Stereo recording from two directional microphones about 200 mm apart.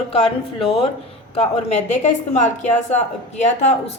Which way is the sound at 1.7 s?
35° left (ahead or behind).